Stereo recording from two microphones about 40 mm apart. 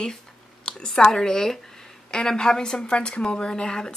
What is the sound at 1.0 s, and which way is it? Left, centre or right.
A woman's voice, centre.